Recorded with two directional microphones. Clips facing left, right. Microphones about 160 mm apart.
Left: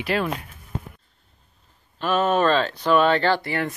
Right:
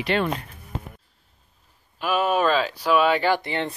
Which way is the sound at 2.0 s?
5° right (ahead or behind).